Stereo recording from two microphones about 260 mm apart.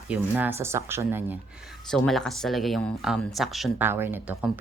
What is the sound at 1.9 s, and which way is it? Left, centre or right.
A woman's voice, centre.